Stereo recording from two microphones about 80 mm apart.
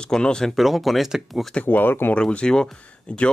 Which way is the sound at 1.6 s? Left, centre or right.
Left.